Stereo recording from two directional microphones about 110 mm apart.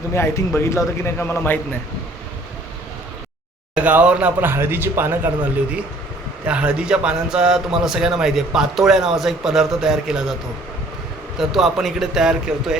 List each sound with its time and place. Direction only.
0.1 s a man's voice: 25° left (ahead or behind)
3.8 s speech: 15° right (ahead or behind)
6.4 s a man's voice: 10° right (ahead or behind)
11.3 s a man's voice: centre (ahead or behind)